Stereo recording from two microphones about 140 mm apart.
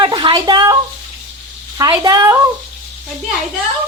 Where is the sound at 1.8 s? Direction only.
25° right (ahead or behind).